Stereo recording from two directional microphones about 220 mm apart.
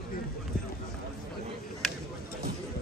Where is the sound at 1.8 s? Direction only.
Centre (ahead or behind).